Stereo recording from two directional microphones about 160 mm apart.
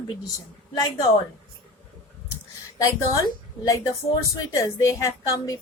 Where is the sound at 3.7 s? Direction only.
20° left (ahead or behind).